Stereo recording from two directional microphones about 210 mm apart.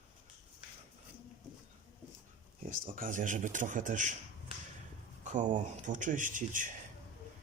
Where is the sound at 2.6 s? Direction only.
40° right (ahead or behind).